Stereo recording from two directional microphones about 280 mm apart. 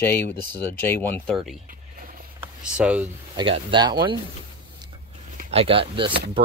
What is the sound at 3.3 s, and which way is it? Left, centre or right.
Speech, centre.